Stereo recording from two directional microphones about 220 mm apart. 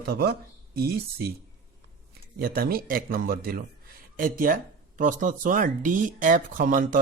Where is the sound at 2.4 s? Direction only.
45° right (ahead or behind).